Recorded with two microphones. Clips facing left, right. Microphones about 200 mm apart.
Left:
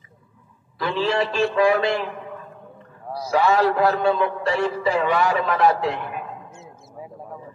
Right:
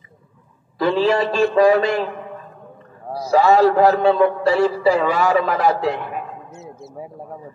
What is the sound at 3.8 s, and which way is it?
A man's voice, 40° right (ahead or behind).